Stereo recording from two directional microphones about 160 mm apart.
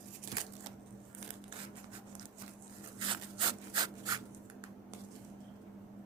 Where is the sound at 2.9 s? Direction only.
30° right (ahead or behind).